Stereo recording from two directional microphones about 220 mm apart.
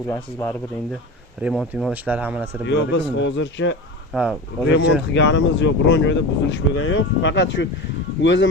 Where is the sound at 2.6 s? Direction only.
55° left (ahead or behind).